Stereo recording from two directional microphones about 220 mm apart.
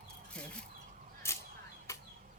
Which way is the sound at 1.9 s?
15° left (ahead or behind).